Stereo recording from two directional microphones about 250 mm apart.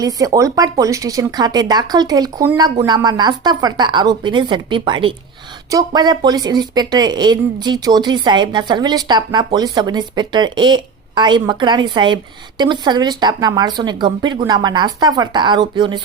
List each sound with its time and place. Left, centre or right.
0.0 s speech: centre